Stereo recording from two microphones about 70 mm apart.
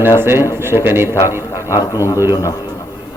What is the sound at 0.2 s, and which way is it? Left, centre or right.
Speech, right.